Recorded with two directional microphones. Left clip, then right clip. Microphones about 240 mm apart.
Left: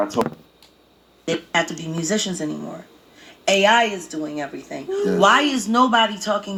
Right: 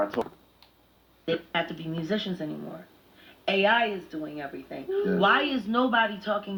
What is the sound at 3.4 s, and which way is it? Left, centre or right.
A man's voice, left.